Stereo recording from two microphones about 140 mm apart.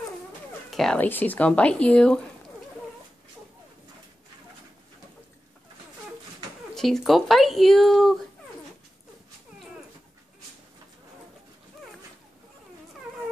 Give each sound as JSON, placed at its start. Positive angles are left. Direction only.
{"t": 0.7, "sound": "cat", "side_deg": 0}
{"t": 0.9, "sound": "speech", "side_deg": 15}
{"t": 6.7, "sound": "speech", "side_deg": 0}